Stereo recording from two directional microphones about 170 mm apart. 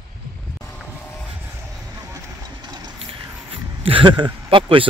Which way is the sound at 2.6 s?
25° right (ahead or behind).